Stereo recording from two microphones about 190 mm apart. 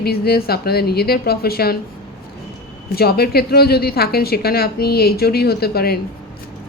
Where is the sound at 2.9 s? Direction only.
55° left (ahead or behind).